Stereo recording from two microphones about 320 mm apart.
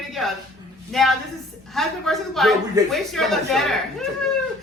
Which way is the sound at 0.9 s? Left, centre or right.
Centre.